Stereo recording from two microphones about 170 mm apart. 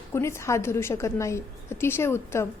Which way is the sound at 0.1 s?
15° left (ahead or behind).